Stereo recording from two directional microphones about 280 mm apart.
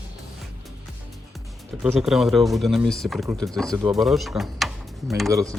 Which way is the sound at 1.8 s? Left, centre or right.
Centre.